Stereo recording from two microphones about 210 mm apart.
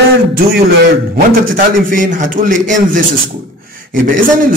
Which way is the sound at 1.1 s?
40° right (ahead or behind).